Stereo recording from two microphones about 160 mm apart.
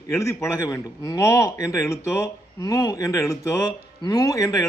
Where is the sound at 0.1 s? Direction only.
20° left (ahead or behind).